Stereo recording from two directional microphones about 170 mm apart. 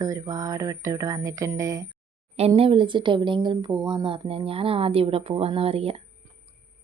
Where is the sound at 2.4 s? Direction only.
35° right (ahead or behind).